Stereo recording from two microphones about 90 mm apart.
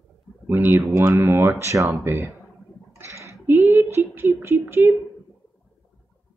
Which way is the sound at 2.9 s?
30° right (ahead or behind).